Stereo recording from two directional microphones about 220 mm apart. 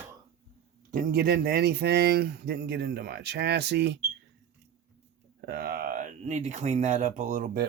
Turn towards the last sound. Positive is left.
turn(degrees=-40)  # may be behind; listen again after turning